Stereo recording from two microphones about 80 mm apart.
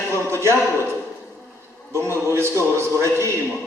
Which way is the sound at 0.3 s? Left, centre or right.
Right.